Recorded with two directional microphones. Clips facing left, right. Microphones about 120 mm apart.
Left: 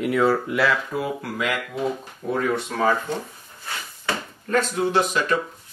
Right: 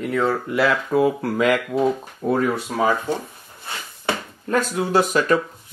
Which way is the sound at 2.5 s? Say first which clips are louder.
Right 1 dB; 10° right (ahead or behind).